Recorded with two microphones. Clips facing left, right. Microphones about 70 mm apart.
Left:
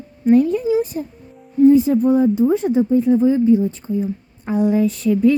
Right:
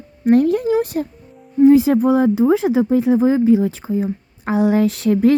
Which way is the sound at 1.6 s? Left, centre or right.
Right.